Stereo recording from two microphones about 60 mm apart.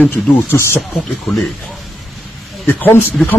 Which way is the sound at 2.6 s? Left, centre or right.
Left.